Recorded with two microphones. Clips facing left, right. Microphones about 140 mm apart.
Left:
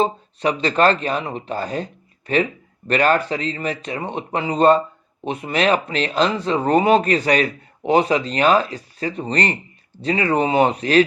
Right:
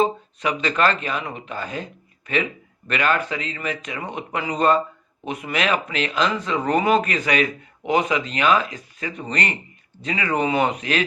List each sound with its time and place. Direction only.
0.0 s speech: 35° left (ahead or behind)